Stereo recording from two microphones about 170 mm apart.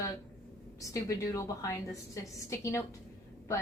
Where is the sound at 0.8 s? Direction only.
20° left (ahead or behind).